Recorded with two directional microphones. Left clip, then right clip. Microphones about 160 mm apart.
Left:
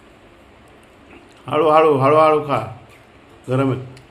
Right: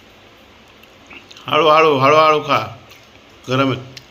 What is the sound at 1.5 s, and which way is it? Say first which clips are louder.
A man's voice: right 2 dB; 5° left (ahead or behind).